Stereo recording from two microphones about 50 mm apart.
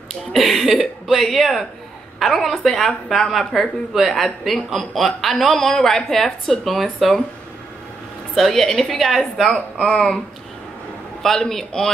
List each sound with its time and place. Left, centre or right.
0.3 s a woman's voice: centre
8.4 s a woman's voice: centre
9.8 s a sound: centre
11.2 s a woman's voice: centre